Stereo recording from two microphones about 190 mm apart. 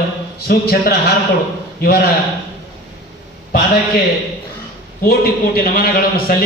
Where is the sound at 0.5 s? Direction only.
55° left (ahead or behind).